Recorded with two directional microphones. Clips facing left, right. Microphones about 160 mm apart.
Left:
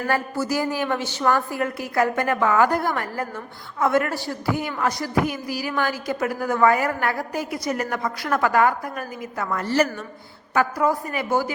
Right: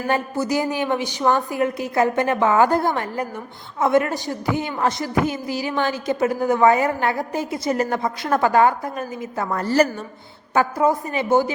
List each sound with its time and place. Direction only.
0.1 s a woman's voice: 20° right (ahead or behind); by 9.9 s 35° right (ahead or behind)
10.5 s a woman's voice: 25° right (ahead or behind)